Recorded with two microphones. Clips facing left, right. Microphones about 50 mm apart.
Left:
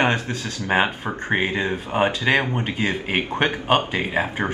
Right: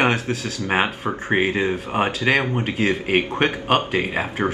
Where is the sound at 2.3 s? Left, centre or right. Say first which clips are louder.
Right 3 dB; left.